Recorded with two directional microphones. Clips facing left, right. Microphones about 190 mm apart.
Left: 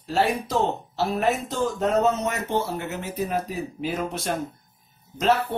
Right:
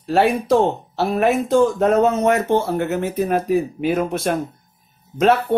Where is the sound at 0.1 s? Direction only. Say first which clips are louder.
Right 7 dB; 60° right (ahead or behind).